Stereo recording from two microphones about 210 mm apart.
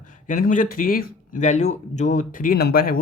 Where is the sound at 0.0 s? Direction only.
40° left (ahead or behind).